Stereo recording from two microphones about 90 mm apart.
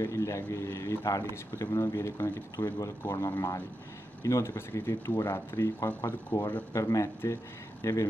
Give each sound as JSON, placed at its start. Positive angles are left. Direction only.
{"t": 0.0, "sound": "speech", "side_deg": 35}
{"t": 5.0, "sound": "speech", "side_deg": 45}
{"t": 5.3, "sound": "speech", "side_deg": 30}